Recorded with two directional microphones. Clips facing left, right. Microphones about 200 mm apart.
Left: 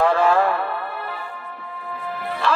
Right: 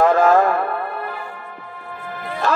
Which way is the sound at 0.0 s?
45° right (ahead or behind).